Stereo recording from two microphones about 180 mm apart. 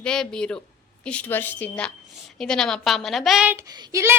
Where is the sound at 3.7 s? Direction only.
20° right (ahead or behind).